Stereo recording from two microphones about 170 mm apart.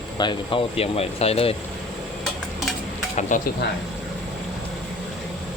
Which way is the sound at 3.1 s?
45° left (ahead or behind).